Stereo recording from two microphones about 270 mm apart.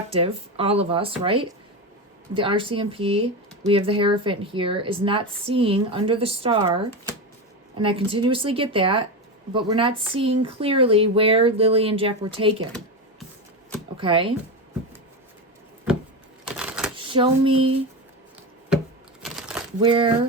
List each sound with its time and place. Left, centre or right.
0.1 s speech: right
13.9 s speech: centre
16.5 s a sound: centre
16.9 s a sound: centre
19.2 s crumpling: centre
19.8 s speech: centre